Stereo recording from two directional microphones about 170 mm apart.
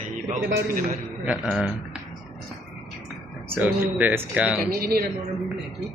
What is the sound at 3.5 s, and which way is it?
Speech, 10° right (ahead or behind).